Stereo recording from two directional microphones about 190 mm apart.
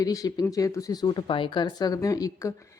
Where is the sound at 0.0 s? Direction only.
20° left (ahead or behind).